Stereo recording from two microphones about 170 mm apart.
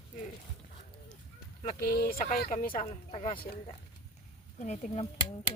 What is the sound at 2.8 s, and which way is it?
Speech, 35° left (ahead or behind).